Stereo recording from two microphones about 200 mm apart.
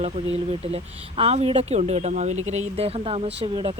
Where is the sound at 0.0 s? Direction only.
30° right (ahead or behind).